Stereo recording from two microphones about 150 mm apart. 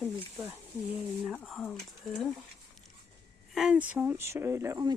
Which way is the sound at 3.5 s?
5° right (ahead or behind).